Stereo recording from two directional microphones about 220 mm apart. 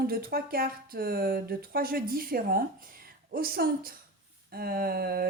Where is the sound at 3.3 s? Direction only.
45° right (ahead or behind).